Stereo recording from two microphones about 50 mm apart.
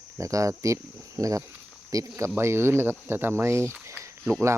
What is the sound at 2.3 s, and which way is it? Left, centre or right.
Speech, right.